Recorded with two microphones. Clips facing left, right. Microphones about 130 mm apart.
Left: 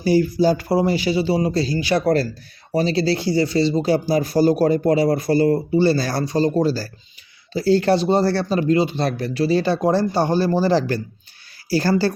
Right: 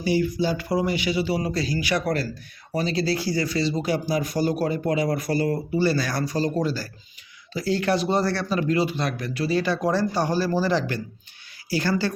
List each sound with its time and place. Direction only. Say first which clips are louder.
0.0 s speech: left 6 dB; 40° left (ahead or behind)